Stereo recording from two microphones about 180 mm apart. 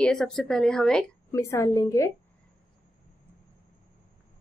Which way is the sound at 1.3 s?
15° left (ahead or behind).